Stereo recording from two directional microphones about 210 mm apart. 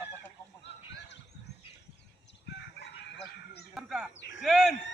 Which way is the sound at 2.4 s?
55° left (ahead or behind).